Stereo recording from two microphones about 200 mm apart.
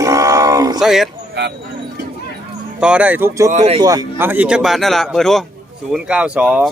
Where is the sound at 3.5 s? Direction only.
35° right (ahead or behind).